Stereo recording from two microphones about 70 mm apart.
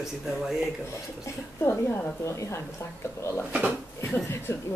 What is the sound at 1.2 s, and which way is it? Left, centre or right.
A woman's voice, left.